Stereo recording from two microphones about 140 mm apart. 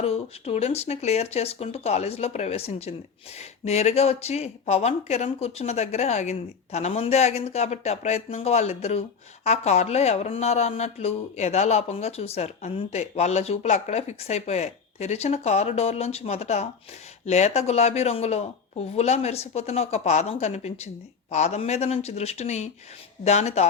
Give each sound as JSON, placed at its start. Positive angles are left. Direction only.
{"t": 0.0, "sound": "speech", "side_deg": 45}